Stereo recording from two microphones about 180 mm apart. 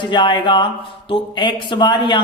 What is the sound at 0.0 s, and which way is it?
Speech, 25° left (ahead or behind).